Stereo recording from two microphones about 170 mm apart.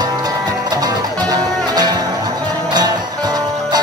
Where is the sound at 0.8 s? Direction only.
25° right (ahead or behind).